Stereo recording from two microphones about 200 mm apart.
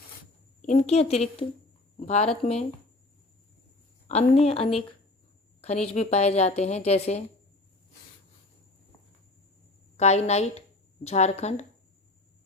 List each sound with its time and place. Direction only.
0.6 s a woman's voice: 35° left (ahead or behind)
4.1 s a woman's voice: 30° left (ahead or behind)
10.0 s a woman's voice: 35° left (ahead or behind)